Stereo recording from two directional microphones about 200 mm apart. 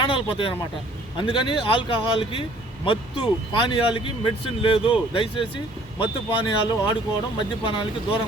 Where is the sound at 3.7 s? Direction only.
25° left (ahead or behind).